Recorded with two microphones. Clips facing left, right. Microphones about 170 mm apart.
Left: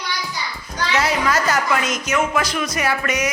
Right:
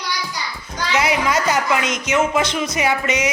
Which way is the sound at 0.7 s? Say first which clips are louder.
Right 1 dB; 15° right (ahead or behind).